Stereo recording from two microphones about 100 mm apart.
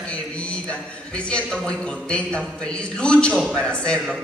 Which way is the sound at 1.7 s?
10° left (ahead or behind).